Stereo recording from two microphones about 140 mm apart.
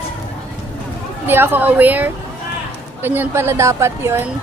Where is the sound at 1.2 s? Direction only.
15° right (ahead or behind).